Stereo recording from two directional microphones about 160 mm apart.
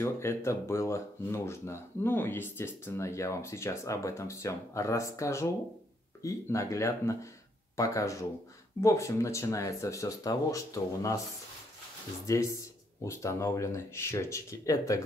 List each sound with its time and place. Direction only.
0.0 s speech: 15° left (ahead or behind)
12.3 s speech: 20° left (ahead or behind)